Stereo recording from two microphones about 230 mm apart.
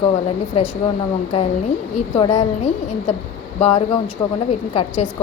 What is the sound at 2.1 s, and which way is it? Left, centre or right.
Speech, left.